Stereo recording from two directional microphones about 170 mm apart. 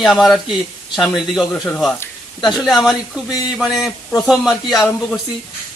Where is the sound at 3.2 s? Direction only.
20° left (ahead or behind).